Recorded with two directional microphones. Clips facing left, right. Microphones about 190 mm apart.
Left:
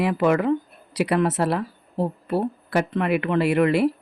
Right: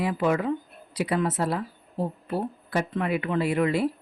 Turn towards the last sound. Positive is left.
turn(degrees=70)  # may be behind; listen again after turning